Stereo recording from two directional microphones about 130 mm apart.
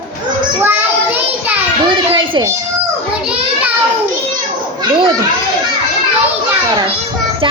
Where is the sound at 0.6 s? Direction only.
15° right (ahead or behind).